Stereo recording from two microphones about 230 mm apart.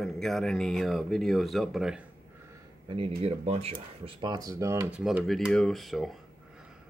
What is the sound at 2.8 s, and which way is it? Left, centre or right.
Speech, right.